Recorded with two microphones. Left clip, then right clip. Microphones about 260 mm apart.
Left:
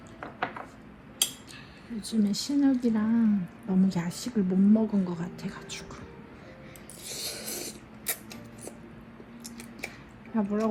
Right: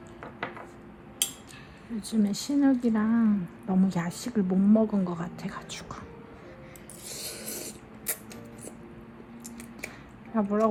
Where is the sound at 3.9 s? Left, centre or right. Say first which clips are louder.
Right 1 dB; right.